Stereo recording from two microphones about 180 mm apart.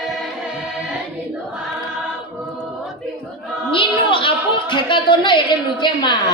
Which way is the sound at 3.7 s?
30° left (ahead or behind).